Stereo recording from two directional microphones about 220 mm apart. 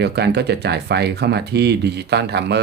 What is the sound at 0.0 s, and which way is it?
Speech, 50° right (ahead or behind).